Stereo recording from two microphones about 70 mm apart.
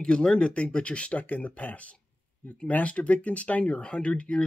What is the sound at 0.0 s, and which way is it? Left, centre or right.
Speech, centre.